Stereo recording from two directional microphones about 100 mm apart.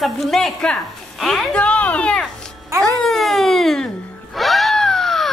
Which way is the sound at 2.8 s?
5° left (ahead or behind).